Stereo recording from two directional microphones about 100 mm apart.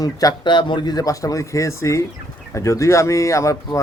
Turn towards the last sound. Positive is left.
turn(degrees=30)  # may be behind; listen again after turning